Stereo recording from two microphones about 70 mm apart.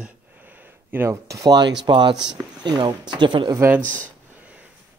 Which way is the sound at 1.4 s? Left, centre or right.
Right.